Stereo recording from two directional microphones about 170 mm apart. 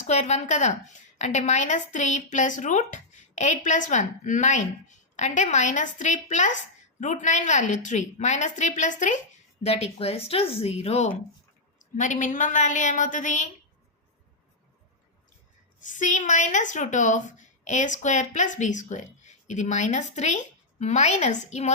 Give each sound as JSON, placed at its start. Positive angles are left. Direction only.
{"t": 0.0, "sound": "a woman's voice", "side_deg": 40}
{"t": 9.6, "sound": "a woman's voice", "side_deg": 35}
{"t": 15.8, "sound": "a woman's voice", "side_deg": 45}